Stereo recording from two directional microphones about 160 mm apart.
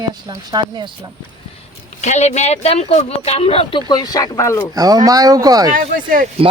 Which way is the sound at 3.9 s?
25° left (ahead or behind).